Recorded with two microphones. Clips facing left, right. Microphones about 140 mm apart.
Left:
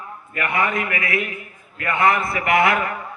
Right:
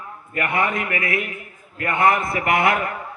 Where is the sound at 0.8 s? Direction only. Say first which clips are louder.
Left 1 dB; 50° right (ahead or behind).